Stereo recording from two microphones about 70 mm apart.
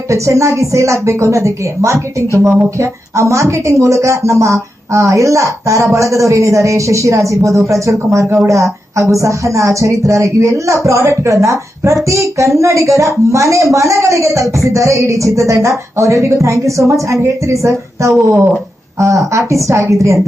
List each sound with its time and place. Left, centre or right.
0.1 s speech: right